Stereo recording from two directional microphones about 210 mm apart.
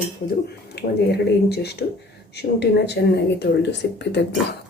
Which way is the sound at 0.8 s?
50° left (ahead or behind).